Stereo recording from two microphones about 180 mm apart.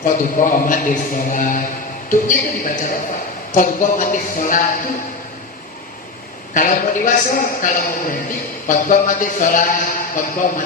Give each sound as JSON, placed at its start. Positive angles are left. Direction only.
{"t": 0.0, "sound": "a man's voice", "side_deg": 50}
{"t": 6.5, "sound": "a man's voice", "side_deg": 45}